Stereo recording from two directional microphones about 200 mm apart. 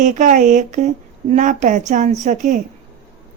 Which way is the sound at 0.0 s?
40° right (ahead or behind).